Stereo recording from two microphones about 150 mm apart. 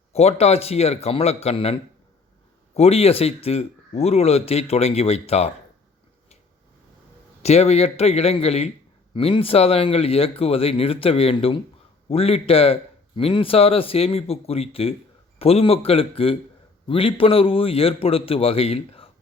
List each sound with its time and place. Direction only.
0.1 s speech: 45° left (ahead or behind)
2.7 s speech: 45° left (ahead or behind)
7.4 s a man's voice: 45° left (ahead or behind)